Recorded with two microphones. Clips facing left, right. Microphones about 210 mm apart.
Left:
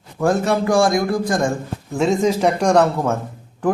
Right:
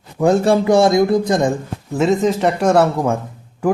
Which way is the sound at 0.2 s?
15° right (ahead or behind).